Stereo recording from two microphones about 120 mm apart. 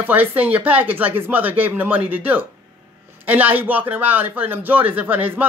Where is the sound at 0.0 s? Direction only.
15° right (ahead or behind).